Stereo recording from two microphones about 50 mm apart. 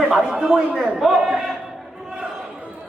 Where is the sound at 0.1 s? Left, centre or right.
Centre.